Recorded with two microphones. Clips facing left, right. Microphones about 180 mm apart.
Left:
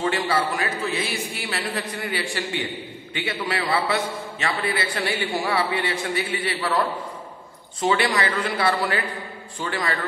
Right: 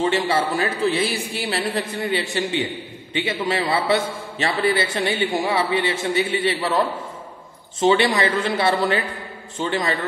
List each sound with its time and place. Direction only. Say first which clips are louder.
0.0 s a man's voice: right 3 dB; 25° right (ahead or behind)
7.8 s a man's voice: right 4 dB; 25° right (ahead or behind)